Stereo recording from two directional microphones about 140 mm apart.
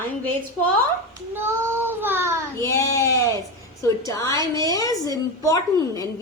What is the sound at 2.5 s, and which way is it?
A woman's voice, 20° left (ahead or behind).